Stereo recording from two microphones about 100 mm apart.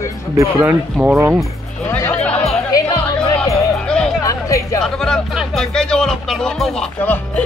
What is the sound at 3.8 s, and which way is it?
Music, 10° left (ahead or behind).